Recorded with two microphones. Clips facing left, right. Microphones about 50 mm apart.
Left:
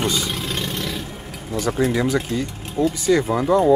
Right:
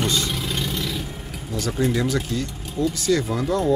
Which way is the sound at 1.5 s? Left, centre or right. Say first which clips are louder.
Left 3 dB; left.